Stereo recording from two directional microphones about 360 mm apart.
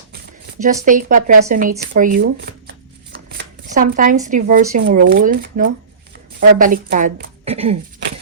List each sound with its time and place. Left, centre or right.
0.6 s speech: right